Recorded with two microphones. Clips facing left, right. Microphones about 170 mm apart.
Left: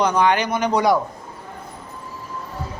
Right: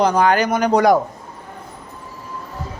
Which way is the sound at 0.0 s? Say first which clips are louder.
Right 3 dB; 40° right (ahead or behind).